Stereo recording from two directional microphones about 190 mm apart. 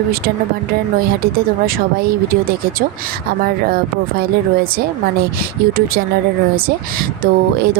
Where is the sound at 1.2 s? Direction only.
50° right (ahead or behind).